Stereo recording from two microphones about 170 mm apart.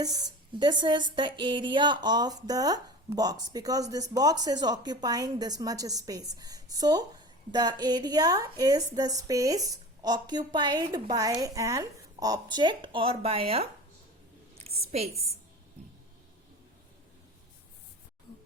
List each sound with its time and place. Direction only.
0.0 s a woman's voice: 20° right (ahead or behind); by 15.2 s 40° right (ahead or behind)